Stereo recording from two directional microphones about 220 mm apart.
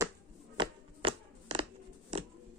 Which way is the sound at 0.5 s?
20° right (ahead or behind).